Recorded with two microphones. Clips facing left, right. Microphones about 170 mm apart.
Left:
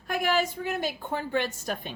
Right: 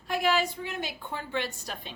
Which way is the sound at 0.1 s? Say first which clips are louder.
Even; 50° left (ahead or behind).